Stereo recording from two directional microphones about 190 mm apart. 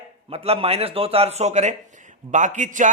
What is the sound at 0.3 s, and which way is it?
A man's voice, 30° right (ahead or behind).